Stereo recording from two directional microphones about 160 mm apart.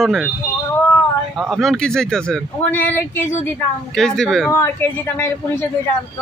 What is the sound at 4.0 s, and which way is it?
Speech, centre (ahead or behind).